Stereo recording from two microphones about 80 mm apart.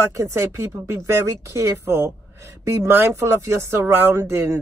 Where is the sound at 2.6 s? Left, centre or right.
Right.